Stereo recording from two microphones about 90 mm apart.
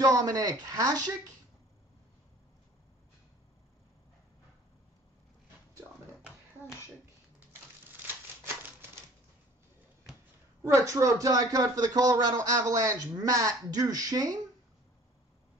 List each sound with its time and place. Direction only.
0.0 s speech: 45° right (ahead or behind)
10.6 s speech: 30° right (ahead or behind)